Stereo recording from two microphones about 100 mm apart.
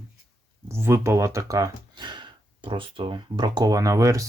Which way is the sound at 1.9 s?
50° right (ahead or behind).